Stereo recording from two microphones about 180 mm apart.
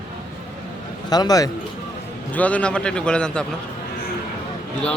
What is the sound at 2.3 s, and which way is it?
A man's voice, 5° left (ahead or behind).